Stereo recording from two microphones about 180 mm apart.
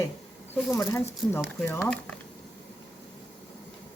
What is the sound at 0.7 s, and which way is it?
Speech, 15° left (ahead or behind).